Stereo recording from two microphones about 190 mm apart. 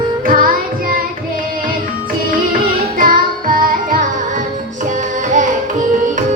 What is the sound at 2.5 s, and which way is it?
Music, 50° right (ahead or behind).